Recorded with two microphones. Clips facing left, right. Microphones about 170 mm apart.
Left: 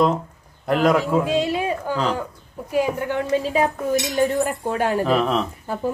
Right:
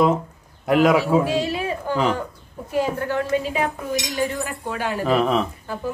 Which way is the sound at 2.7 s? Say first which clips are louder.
Left 1 dB; 15° left (ahead or behind).